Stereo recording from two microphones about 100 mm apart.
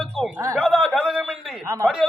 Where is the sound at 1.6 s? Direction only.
30° right (ahead or behind).